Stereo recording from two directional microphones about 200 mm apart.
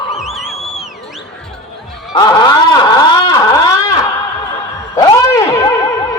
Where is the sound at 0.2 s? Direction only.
Centre (ahead or behind).